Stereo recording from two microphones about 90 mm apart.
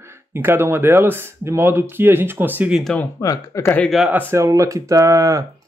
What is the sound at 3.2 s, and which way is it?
Speech, 35° left (ahead or behind).